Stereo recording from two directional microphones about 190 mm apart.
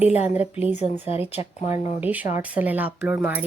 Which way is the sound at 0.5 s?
10° right (ahead or behind).